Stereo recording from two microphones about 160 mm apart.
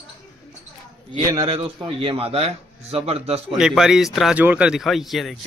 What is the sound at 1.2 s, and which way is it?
Speech, 25° right (ahead or behind).